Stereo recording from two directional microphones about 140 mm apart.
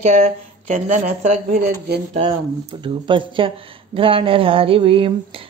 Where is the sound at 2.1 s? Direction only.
40° right (ahead or behind).